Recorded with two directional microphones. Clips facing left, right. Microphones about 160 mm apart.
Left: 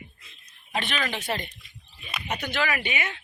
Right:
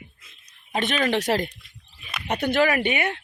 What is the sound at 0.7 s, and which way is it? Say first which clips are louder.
Speech: right 5 dB; 45° right (ahead or behind).